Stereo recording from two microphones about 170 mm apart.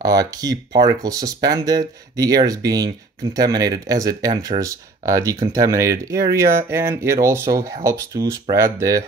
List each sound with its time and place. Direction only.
0.0 s speech: 20° right (ahead or behind)